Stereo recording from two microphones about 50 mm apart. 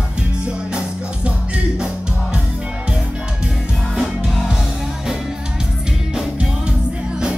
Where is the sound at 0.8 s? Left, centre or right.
Right.